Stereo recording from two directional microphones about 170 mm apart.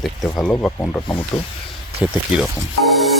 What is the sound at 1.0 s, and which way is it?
Speech, 25° left (ahead or behind).